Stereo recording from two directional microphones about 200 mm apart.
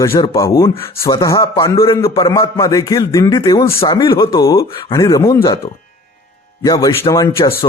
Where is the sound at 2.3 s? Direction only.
15° left (ahead or behind).